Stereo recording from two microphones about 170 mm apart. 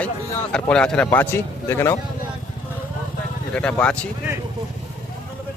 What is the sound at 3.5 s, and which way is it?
Speech, 5° left (ahead or behind).